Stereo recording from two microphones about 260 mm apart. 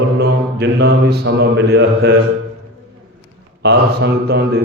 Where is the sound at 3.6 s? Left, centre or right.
Right.